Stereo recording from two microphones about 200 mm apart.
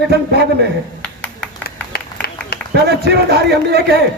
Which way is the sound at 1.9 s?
50° left (ahead or behind).